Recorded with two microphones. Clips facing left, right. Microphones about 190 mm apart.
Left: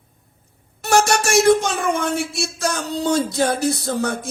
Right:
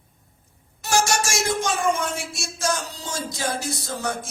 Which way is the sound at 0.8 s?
60° left (ahead or behind).